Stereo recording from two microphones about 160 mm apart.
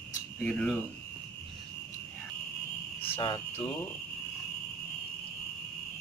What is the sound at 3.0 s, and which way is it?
Speech, 35° left (ahead or behind).